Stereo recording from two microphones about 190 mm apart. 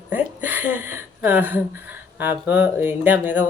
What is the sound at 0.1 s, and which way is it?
Speech, 10° right (ahead or behind).